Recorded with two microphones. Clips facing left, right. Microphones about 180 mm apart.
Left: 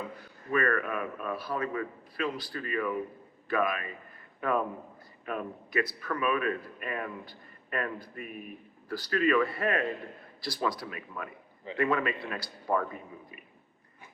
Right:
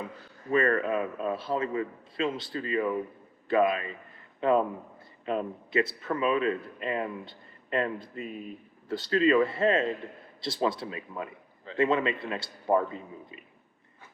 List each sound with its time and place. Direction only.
0.5 s a man's voice: 25° right (ahead or behind)